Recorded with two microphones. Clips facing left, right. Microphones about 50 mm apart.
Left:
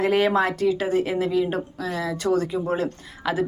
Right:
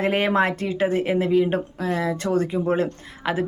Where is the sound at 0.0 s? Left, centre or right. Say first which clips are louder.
Even; right.